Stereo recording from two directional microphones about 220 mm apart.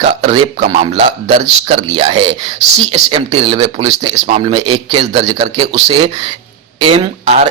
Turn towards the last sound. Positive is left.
turn(degrees=-25)  # may be behind; listen again after turning